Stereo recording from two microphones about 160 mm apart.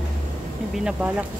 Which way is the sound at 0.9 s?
10° right (ahead or behind).